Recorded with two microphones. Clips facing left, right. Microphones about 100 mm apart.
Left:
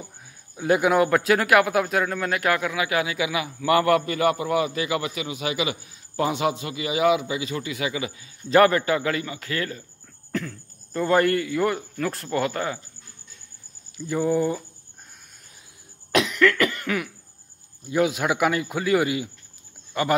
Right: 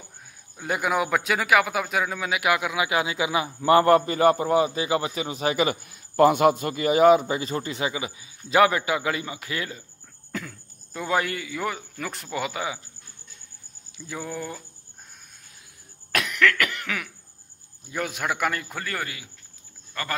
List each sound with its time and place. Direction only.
0.6 s a man's voice: centre (ahead or behind); by 8.1 s 25° right (ahead or behind)
8.5 s a man's voice: 10° right (ahead or behind)
10.3 s speech: 5° right (ahead or behind)
13.9 s speech: centre (ahead or behind)
16.2 s cough: 5° left (ahead or behind)
17.8 s speech: 5° left (ahead or behind)